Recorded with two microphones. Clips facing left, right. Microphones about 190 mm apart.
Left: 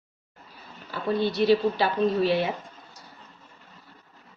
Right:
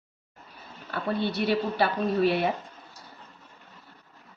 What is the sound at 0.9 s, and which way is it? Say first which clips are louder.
A woman's voice: left 3 dB; 60° right (ahead or behind).